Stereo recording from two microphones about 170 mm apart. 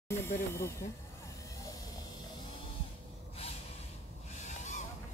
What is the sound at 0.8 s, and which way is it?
Speech, 40° left (ahead or behind).